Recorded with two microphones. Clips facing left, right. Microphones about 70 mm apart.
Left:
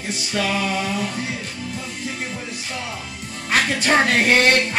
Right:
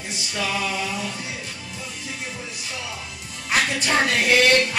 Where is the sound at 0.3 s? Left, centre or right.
Left.